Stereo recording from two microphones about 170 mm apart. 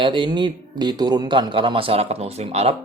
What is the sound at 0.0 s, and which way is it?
A man's voice, 30° right (ahead or behind).